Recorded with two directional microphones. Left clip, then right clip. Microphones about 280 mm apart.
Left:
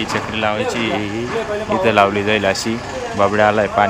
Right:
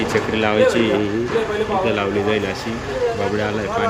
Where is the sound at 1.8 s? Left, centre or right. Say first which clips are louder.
Left 5 dB; centre.